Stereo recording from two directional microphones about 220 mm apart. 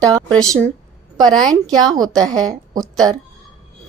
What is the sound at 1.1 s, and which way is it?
A woman's voice, 20° right (ahead or behind).